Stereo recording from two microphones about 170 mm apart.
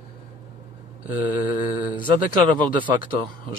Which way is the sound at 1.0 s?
10° right (ahead or behind).